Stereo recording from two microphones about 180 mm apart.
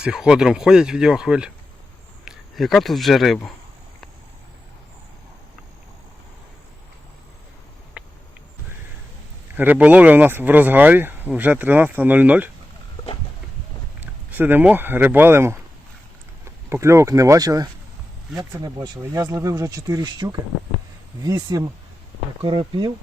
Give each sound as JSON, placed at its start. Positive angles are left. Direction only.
{"t": 0.0, "sound": "speech", "side_deg": -5}
{"t": 8.0, "sound": "a sound", "side_deg": -5}
{"t": 9.6, "sound": "speech", "side_deg": -10}
{"t": 14.0, "sound": "speech", "side_deg": -10}